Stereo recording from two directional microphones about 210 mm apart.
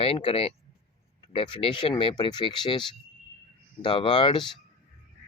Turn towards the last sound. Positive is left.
turn(degrees=25)  # may be behind; listen again after turning